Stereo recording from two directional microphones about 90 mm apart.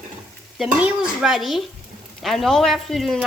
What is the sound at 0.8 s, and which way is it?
Speech, 10° right (ahead or behind).